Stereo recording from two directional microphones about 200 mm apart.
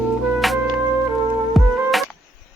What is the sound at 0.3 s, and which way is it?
Music, centre (ahead or behind).